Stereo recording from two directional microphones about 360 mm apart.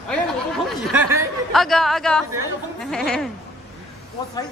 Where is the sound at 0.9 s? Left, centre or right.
Centre.